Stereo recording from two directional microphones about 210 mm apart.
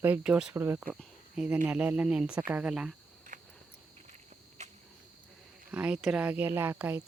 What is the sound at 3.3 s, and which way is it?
Cricket, 35° right (ahead or behind).